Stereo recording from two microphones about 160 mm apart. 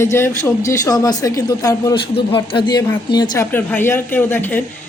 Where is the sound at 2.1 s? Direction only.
35° left (ahead or behind).